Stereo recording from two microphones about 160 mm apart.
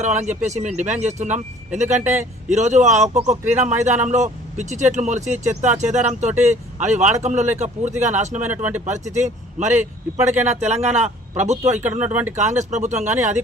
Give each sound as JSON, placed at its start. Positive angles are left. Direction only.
{"t": 0.0, "sound": "a man's voice", "side_deg": -45}
{"t": 8.4, "sound": "speech", "side_deg": -10}
{"t": 8.8, "sound": "a man's voice", "side_deg": -45}
{"t": 11.9, "sound": "speech", "side_deg": -10}
{"t": 12.4, "sound": "a man's voice", "side_deg": -45}